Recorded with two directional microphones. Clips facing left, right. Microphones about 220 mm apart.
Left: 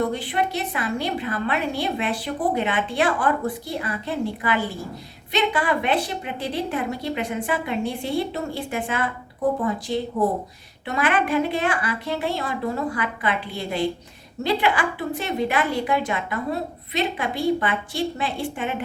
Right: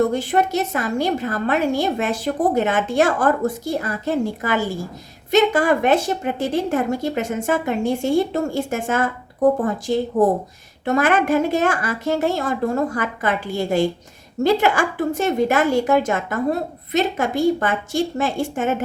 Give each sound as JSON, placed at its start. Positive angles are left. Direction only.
{"t": 0.0, "sound": "a woman's voice", "side_deg": -45}